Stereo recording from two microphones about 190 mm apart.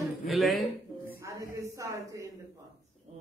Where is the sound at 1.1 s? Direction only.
15° right (ahead or behind).